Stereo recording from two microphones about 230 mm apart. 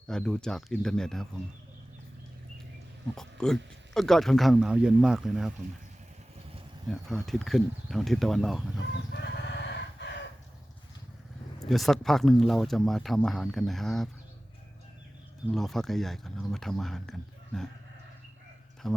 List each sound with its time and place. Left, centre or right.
0.1 s speech: centre
3.2 s speech: centre
6.9 s speech: centre
9.1 s chicken: left
11.6 s speech: centre
15.5 s speech: centre
18.8 s speech: centre